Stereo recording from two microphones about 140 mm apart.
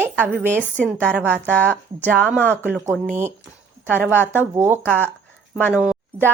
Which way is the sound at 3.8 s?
15° left (ahead or behind).